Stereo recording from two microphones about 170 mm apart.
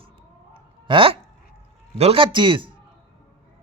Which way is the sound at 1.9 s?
35° right (ahead or behind).